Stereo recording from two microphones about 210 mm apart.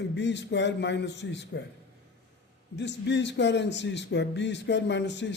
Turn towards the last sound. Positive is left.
turn(degrees=55)  # may be behind; listen again after turning